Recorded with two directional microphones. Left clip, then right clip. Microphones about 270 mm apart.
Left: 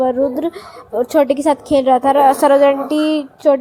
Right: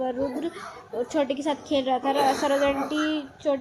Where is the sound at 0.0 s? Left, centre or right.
Left.